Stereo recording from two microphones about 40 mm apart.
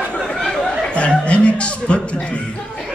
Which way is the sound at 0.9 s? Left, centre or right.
Left.